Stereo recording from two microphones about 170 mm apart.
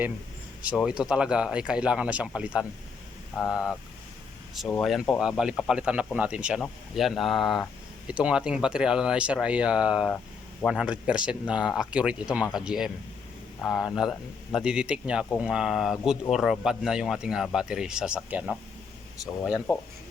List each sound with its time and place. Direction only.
0.6 s speech: 10° right (ahead or behind)
4.8 s speech: centre (ahead or behind)
19.7 s speech: 20° left (ahead or behind)